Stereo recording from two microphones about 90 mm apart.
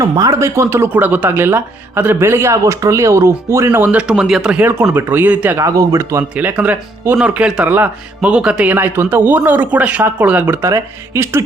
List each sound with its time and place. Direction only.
0.0 s speech: 40° right (ahead or behind)
3.9 s speech: 10° right (ahead or behind)
4.6 s speech: 25° right (ahead or behind)
5.5 s speech: 40° right (ahead or behind)
6.3 s speech: 15° right (ahead or behind)
10.6 s speech: 30° right (ahead or behind)